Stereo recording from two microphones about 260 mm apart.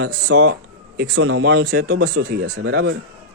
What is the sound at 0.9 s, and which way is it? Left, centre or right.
Speech, right.